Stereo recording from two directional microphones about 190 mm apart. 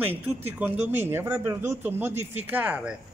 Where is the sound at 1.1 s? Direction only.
10° right (ahead or behind).